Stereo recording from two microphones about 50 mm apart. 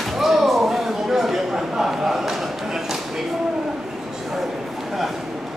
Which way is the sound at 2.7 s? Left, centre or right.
Centre.